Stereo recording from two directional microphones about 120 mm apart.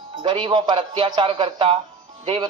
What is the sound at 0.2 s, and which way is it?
A man's voice, 45° right (ahead or behind).